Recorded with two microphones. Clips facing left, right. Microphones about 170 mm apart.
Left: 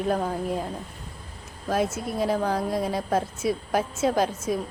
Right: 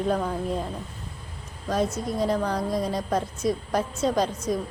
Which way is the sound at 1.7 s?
5° left (ahead or behind).